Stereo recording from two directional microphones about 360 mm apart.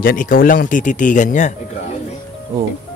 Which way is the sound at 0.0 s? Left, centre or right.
Left.